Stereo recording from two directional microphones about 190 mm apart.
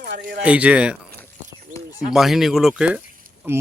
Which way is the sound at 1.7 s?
40° right (ahead or behind).